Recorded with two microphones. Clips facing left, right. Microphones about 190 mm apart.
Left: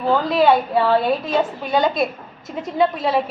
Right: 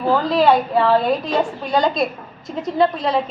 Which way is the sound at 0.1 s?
Centre (ahead or behind).